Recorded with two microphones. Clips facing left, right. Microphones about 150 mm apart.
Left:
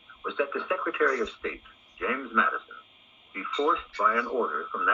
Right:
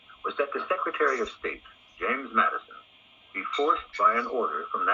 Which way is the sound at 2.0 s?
60° right (ahead or behind).